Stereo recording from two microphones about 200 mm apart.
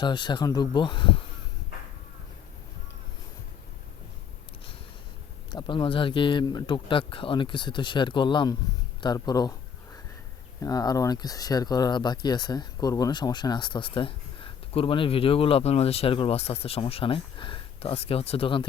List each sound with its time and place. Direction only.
0.0 s speech: 20° left (ahead or behind)
5.5 s speech: 20° left (ahead or behind)
10.6 s speech: 20° left (ahead or behind)